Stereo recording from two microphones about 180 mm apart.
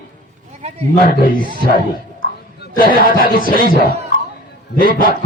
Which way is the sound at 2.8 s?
50° left (ahead or behind).